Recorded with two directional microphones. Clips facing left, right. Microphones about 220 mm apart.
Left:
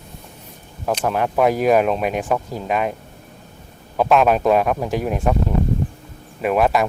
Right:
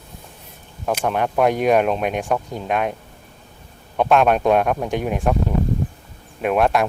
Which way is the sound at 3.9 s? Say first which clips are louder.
Even; centre (ahead or behind).